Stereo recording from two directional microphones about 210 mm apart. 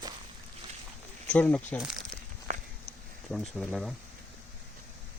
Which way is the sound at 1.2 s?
5° left (ahead or behind).